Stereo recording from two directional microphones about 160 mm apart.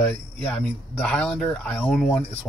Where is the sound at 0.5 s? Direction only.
5° left (ahead or behind).